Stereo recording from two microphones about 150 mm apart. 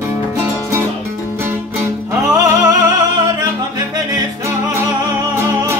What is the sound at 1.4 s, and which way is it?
Music, 15° right (ahead or behind).